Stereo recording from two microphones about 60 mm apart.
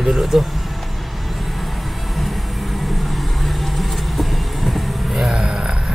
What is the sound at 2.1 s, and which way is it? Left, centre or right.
Vehicle, centre.